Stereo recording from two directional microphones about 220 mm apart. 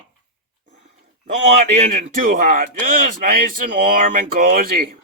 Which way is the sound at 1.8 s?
40° right (ahead or behind).